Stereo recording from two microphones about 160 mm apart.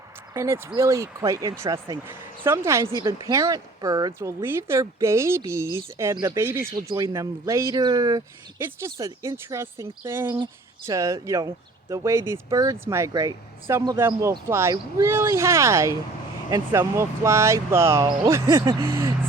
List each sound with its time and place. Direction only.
0.3 s speech: 15° right (ahead or behind)